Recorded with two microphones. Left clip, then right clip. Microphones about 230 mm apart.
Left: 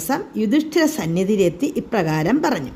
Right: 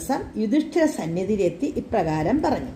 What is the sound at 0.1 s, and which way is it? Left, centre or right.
A woman's voice, left.